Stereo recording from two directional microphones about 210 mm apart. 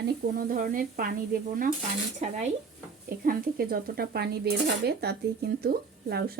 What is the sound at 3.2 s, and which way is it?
Speech, 45° right (ahead or behind).